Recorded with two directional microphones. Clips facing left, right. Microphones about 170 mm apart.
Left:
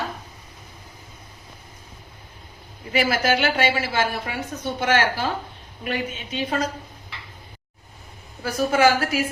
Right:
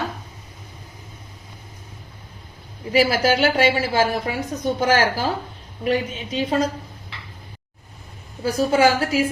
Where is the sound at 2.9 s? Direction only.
35° right (ahead or behind).